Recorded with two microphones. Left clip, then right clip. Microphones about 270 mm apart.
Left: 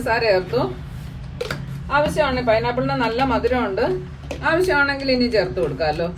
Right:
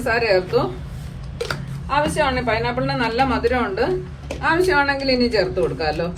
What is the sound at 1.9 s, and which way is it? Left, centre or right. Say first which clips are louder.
A woman's voice: even; right.